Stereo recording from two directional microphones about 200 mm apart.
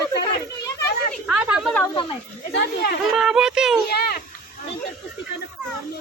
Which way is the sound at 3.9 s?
50° left (ahead or behind).